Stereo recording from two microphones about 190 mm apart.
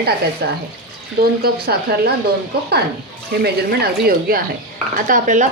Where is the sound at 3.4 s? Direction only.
55° right (ahead or behind).